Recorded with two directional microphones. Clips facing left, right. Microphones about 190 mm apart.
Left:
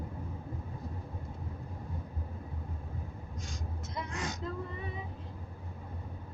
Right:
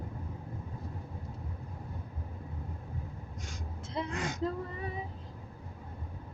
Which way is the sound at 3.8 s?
30° right (ahead or behind).